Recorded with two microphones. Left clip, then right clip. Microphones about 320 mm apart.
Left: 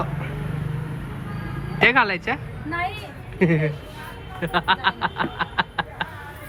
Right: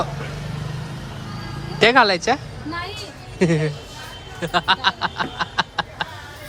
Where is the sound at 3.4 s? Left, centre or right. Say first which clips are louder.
Right 1 dB; centre.